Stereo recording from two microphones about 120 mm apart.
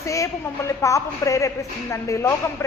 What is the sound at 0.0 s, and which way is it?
A woman's voice, 25° left (ahead or behind).